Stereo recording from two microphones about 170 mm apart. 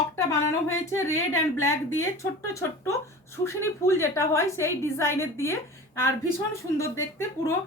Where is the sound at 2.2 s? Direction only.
15° left (ahead or behind).